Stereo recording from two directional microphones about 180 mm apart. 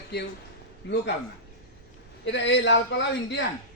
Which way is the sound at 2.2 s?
80° left.